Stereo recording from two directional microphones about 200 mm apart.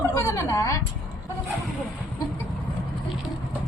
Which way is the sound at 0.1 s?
15° left (ahead or behind).